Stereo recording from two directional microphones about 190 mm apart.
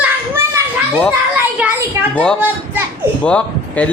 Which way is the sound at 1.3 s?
10° right (ahead or behind).